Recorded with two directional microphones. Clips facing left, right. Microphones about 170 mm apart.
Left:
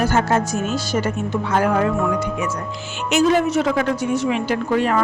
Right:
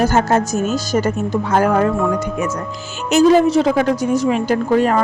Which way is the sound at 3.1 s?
35° right (ahead or behind).